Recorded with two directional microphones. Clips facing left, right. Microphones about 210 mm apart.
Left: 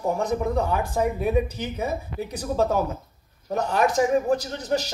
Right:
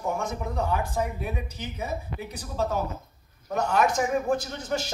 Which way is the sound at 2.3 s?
45° left (ahead or behind).